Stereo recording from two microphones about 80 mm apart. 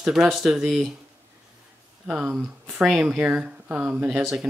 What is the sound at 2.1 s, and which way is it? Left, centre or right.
Speech, centre.